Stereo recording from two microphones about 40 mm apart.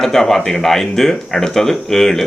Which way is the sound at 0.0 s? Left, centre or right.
Centre.